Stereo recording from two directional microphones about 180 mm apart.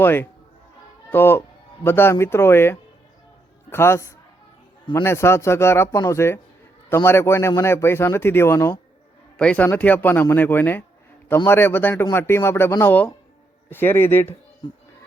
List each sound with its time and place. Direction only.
0.0 s a man's voice: 10° left (ahead or behind)
14.6 s speech: 25° left (ahead or behind)